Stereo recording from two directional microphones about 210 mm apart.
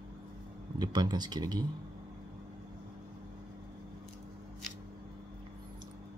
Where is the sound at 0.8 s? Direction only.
20° right (ahead or behind).